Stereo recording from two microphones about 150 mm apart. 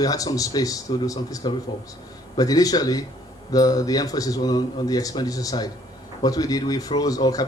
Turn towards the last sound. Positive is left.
turn(degrees=25)  # may be behind; listen again after turning